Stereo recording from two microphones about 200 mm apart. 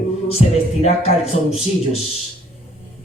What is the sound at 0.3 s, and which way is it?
Speech, 30° left (ahead or behind).